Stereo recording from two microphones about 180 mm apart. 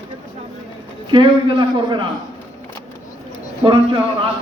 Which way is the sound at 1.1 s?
25° right (ahead or behind).